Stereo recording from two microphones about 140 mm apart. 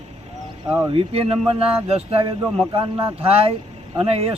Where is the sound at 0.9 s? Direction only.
40° right (ahead or behind).